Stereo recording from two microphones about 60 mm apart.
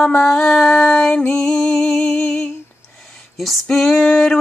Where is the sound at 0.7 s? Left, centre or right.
Centre.